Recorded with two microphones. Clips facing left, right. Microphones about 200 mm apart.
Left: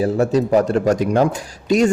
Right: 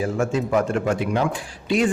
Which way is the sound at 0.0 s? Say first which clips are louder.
Left 6 dB; 35° left (ahead or behind).